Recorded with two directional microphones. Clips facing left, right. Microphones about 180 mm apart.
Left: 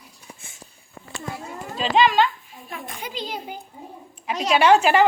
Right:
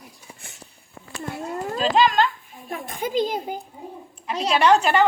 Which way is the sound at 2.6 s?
45° right (ahead or behind).